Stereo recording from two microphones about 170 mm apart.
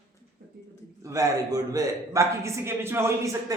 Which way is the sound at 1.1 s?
20° right (ahead or behind).